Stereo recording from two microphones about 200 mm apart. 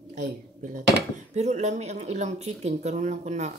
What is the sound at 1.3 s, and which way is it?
Speech, 35° right (ahead or behind).